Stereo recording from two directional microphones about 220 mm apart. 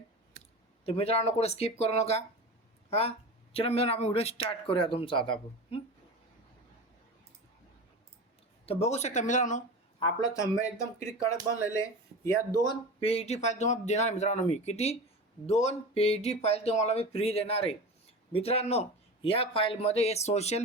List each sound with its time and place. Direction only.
0.9 s speech: 30° left (ahead or behind)
8.6 s speech: 30° left (ahead or behind)
10.0 s speech: 15° left (ahead or behind)